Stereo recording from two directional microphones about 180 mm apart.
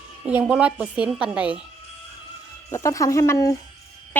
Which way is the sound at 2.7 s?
20° left (ahead or behind).